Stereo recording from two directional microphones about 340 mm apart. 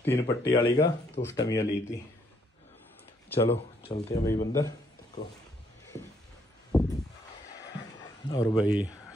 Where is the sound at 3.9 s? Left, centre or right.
Centre.